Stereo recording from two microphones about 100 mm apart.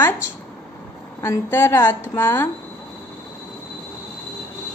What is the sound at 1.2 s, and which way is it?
A woman's voice, 25° left (ahead or behind).